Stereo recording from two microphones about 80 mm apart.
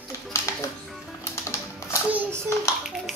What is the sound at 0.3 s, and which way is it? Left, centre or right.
Music, left.